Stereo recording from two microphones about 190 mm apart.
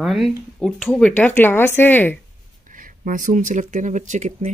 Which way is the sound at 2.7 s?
45° right (ahead or behind).